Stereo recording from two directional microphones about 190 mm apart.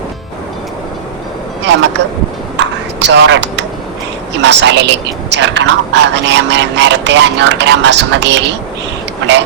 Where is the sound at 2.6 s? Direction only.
70° right (ahead or behind).